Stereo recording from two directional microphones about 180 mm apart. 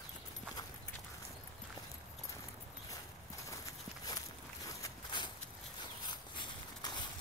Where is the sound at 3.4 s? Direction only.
20° left (ahead or behind).